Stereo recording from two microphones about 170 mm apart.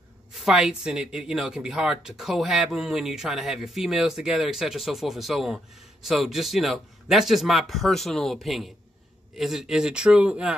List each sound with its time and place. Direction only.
0.3 s speech: centre (ahead or behind)